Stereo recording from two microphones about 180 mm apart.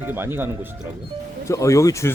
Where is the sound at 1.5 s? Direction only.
15° left (ahead or behind).